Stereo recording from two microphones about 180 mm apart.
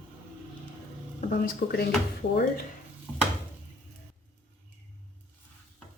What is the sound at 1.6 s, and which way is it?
A woman's voice, 65° left (ahead or behind).